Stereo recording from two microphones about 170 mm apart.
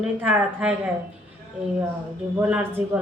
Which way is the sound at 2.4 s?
10° right (ahead or behind).